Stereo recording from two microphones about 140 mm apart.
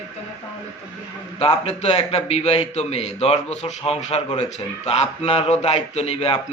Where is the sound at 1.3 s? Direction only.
45° left (ahead or behind).